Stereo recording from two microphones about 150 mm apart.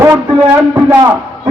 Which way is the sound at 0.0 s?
20° right (ahead or behind).